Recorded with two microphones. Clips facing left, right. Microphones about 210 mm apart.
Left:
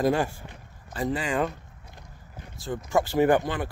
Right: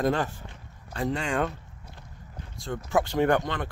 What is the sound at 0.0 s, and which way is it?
Speech, 10° left (ahead or behind).